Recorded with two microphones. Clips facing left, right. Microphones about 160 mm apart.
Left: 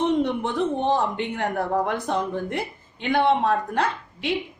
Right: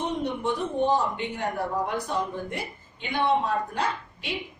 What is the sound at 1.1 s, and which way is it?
A woman's voice, 60° left (ahead or behind).